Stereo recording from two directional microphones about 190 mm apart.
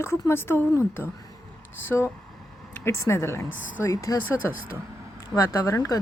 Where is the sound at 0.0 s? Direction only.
15° left (ahead or behind).